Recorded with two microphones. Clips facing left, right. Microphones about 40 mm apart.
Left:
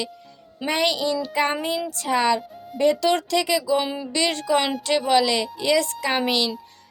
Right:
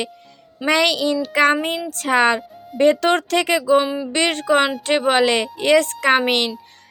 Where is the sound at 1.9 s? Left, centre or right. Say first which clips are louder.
Right 5 dB; right.